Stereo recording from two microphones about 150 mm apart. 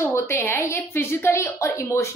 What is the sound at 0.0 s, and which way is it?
A woman's voice, 15° left (ahead or behind).